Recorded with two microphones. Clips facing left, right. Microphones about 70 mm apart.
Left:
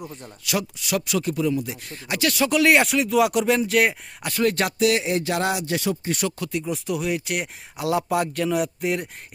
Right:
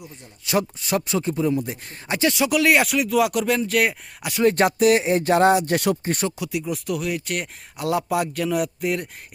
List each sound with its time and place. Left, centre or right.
0.4 s speech: right
2.4 s speech: centre
4.5 s speech: right
5.7 s speech: right
6.4 s speech: centre